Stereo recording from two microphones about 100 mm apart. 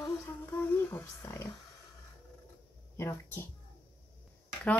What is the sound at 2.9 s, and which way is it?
Speech, 25° left (ahead or behind).